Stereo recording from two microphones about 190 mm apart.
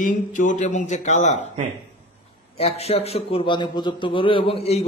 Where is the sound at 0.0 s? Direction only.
45° left (ahead or behind).